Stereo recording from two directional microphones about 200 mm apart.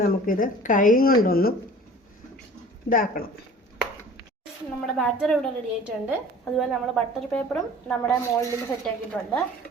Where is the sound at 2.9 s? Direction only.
45° left (ahead or behind).